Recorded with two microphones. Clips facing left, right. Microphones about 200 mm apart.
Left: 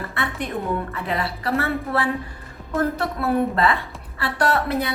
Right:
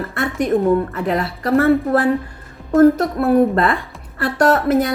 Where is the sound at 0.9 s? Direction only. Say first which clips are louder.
Right 6 dB; 45° right (ahead or behind).